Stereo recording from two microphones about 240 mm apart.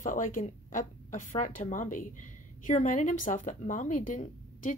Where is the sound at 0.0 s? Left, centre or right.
Left.